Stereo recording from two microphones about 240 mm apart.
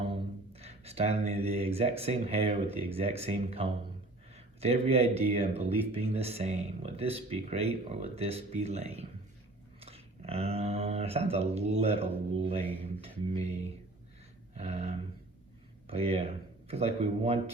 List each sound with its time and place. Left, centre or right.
0.1 s speech: right
12.8 s a sound: right
15.9 s speech: right